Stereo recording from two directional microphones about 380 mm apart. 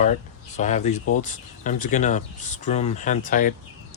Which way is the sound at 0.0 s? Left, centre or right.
Centre.